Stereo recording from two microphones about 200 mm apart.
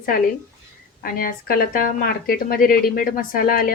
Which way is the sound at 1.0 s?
45° left (ahead or behind).